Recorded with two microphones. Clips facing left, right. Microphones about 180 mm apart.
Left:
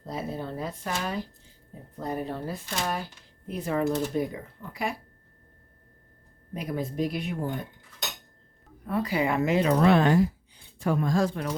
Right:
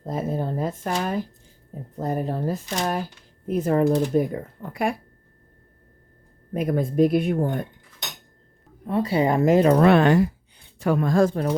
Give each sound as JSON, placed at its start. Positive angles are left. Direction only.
{"t": 0.0, "sound": "speech", "side_deg": -50}
{"t": 6.5, "sound": "speech", "side_deg": -50}
{"t": 8.9, "sound": "speech", "side_deg": -30}